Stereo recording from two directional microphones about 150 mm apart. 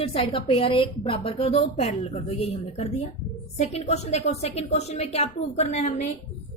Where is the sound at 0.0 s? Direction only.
40° left (ahead or behind).